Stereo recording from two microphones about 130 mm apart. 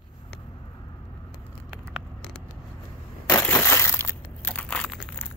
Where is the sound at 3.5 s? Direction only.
20° left (ahead or behind).